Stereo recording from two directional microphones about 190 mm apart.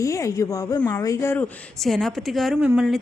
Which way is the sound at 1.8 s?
Centre (ahead or behind).